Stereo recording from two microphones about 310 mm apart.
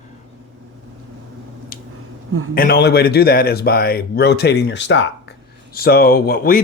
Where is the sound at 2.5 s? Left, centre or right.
Left.